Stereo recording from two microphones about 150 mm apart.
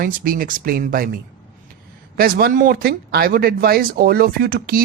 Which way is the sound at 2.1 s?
70° right (ahead or behind).